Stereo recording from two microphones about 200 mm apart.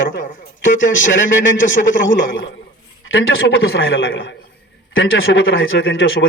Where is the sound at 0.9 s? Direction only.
70° left (ahead or behind).